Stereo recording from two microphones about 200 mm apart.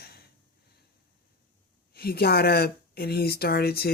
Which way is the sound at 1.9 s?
50° left (ahead or behind).